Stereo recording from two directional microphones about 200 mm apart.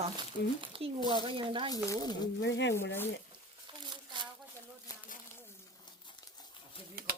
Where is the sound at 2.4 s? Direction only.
60° left (ahead or behind).